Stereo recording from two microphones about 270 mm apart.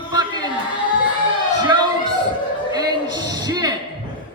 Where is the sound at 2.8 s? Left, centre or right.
Centre.